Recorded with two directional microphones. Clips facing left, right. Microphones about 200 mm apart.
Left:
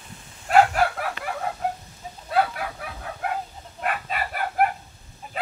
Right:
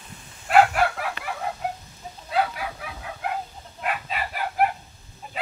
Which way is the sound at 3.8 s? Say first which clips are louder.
Left 1 dB; 50° left (ahead or behind).